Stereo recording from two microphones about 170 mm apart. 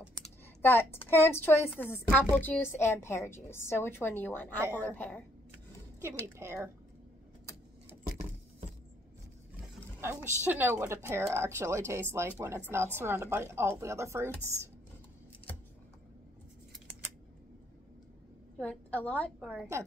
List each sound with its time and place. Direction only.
0.1 s speech: 10° left (ahead or behind)
6.0 s speech: 15° right (ahead or behind)
9.9 s speech: 10° right (ahead or behind)
18.6 s a woman's voice: 5° left (ahead or behind)
19.4 s a woman's voice: 5° right (ahead or behind)